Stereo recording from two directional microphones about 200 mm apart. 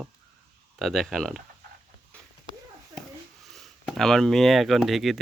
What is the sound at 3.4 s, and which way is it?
Speech, centre (ahead or behind).